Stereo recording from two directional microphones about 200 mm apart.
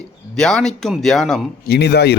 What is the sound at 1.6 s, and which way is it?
Speech, 55° left (ahead or behind).